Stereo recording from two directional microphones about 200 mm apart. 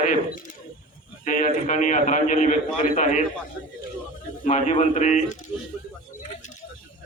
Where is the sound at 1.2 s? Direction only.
40° left (ahead or behind).